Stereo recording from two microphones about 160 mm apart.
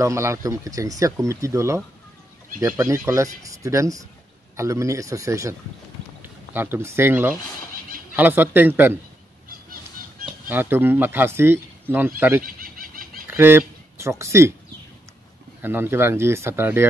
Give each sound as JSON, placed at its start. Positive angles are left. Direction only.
{"t": 0.0, "sound": "speech", "side_deg": -20}
{"t": 10.5, "sound": "speech", "side_deg": -15}
{"t": 12.4, "sound": "a sound", "side_deg": -65}
{"t": 13.3, "sound": "speech", "side_deg": -15}
{"t": 15.6, "sound": "speech", "side_deg": -15}